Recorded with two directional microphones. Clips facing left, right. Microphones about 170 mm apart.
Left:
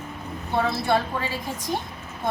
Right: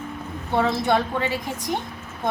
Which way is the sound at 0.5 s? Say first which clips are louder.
Right 2 dB; 20° right (ahead or behind).